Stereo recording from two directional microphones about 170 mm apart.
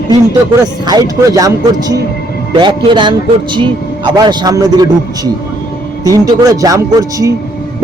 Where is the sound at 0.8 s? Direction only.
20° right (ahead or behind).